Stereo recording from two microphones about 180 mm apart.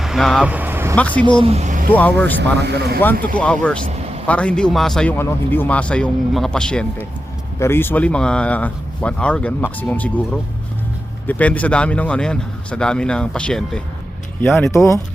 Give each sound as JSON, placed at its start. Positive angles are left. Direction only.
{"t": 0.0, "sound": "speech", "side_deg": 0}
{"t": 0.9, "sound": "speech", "side_deg": 10}
{"t": 1.4, "sound": "speech", "side_deg": -35}
{"t": 1.9, "sound": "speech", "side_deg": 10}
{"t": 2.4, "sound": "speech", "side_deg": -70}
{"t": 3.0, "sound": "a man's voice", "side_deg": 10}
{"t": 11.3, "sound": "a man's voice", "side_deg": 10}
{"t": 14.7, "sound": "speech", "side_deg": 15}